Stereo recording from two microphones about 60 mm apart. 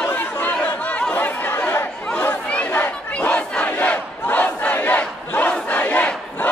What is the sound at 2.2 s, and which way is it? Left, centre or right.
Crowd, left.